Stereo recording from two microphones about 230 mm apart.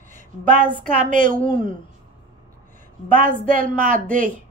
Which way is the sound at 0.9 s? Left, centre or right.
Right.